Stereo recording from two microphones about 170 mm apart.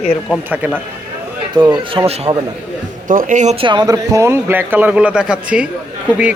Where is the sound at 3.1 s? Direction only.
50° right (ahead or behind); by 5.6 s 5° right (ahead or behind).